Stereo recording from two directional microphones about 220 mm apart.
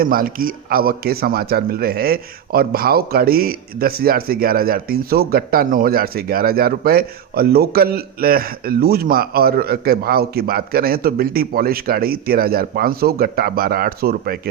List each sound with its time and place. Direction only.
0.0 s a man's voice: 40° right (ahead or behind)